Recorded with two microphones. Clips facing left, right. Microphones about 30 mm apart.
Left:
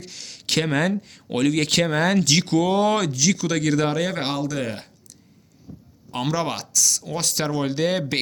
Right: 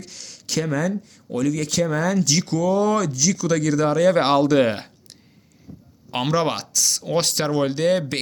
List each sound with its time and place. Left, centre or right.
0.0 s speech: centre
0.4 s speech: left
2.2 s speech: left
3.2 s speech: centre
4.4 s speech: right
6.2 s speech: centre
7.1 s speech: right
7.3 s speech: centre